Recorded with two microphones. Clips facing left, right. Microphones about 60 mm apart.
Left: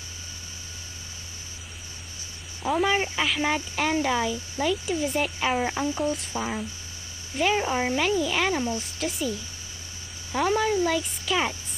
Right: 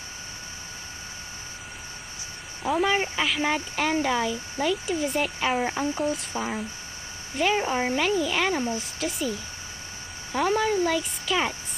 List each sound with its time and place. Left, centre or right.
2.6 s speech: centre
10.3 s speech: centre